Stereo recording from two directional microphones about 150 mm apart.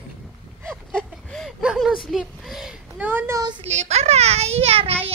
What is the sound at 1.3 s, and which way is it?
A child's voice, centre (ahead or behind).